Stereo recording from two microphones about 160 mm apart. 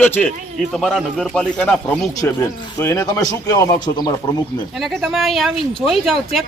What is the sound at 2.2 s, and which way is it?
A man's voice, 20° left (ahead or behind).